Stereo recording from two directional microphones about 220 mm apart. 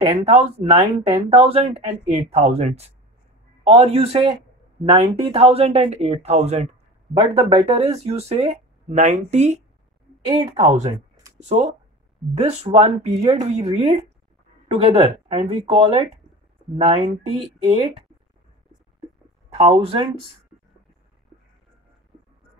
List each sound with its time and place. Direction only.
0.1 s speech: 25° right (ahead or behind)
10.2 s speech: 20° right (ahead or behind)
11.3 s speech: 30° right (ahead or behind)
19.5 s speech: 25° right (ahead or behind)